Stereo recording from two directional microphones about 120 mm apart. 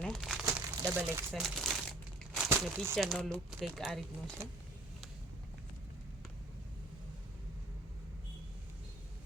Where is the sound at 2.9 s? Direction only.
Centre (ahead or behind).